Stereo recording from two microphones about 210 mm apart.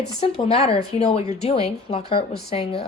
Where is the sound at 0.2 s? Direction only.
30° left (ahead or behind).